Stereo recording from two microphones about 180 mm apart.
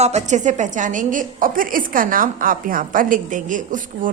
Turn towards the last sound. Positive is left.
turn(degrees=-45)  # may be behind; listen again after turning